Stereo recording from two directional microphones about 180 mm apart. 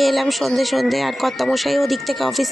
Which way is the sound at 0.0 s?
Centre (ahead or behind).